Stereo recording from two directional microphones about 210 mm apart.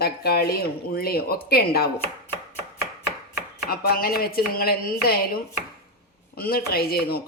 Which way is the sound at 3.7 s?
45° left (ahead or behind).